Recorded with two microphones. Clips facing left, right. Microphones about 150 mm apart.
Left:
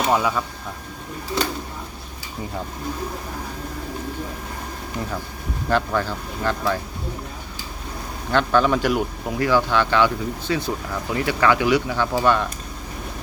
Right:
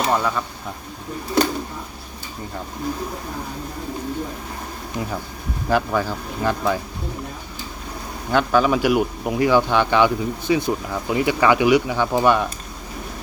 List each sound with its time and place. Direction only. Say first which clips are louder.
0.0 s speech: even; 5° left (ahead or behind)
5.6 s a man's voice: right 1 dB; 10° right (ahead or behind)
8.3 s a man's voice: right 1 dB; 10° right (ahead or behind)